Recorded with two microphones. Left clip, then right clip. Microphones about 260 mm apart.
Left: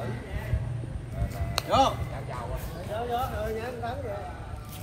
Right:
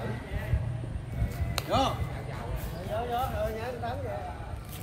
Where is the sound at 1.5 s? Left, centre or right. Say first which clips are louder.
Left 5 dB; centre.